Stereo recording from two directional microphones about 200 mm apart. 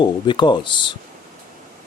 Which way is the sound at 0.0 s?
25° left (ahead or behind).